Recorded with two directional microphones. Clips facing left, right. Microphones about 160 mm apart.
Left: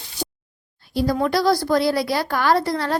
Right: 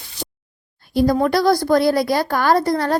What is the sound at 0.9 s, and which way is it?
A woman's voice, 45° right (ahead or behind).